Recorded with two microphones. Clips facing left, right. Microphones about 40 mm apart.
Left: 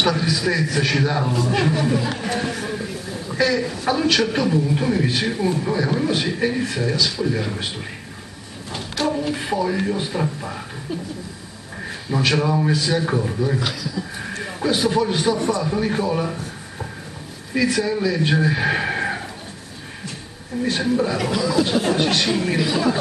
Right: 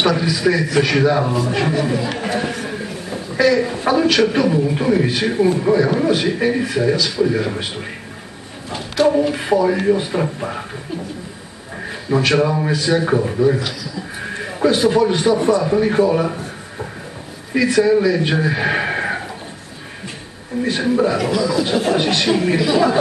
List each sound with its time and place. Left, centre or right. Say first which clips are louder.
0.0 s a man's voice: right 4 dB; centre
2.5 s a sound: right 1 dB; centre
3.5 s a man's voice: right 5 dB; centre
8.6 s a sound: right 6 dB; centre
9.0 s a man's voice: right 7 dB; centre
12.4 s a man's voice: right 2 dB; centre
13.6 s speech: even; centre
14.3 s a man's voice: right 5 dB; centre
15.3 s a man's voice: right 6 dB; right
15.7 s a man's voice: right 6 dB; centre
17.6 s a man's voice: right 6 dB; centre
20.6 s a man's voice: right 3 dB; centre
21.2 s speech: right 2 dB; centre